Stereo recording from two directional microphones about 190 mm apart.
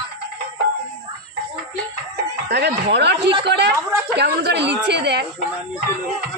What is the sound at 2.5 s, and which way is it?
A woman's voice, 60° right (ahead or behind).